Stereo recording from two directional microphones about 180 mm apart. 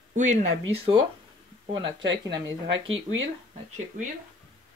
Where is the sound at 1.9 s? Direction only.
20° right (ahead or behind).